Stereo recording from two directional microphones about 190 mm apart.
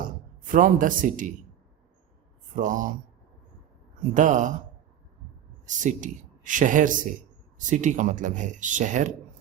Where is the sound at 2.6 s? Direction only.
45° right (ahead or behind).